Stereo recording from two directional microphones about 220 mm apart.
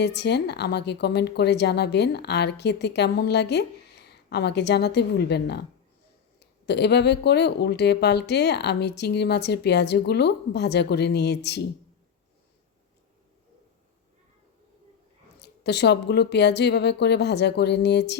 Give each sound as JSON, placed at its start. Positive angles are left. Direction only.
{"t": 0.0, "sound": "a woman's voice", "side_deg": 50}
{"t": 15.4, "sound": "a woman's voice", "side_deg": 50}